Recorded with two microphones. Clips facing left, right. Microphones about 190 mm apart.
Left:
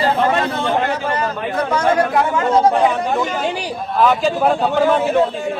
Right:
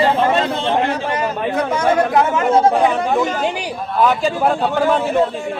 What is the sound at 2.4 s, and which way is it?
Speech, 10° right (ahead or behind).